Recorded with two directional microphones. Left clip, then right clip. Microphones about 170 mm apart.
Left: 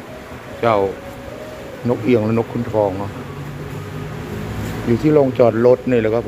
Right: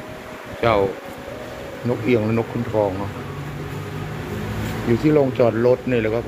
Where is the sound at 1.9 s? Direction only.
25° left (ahead or behind).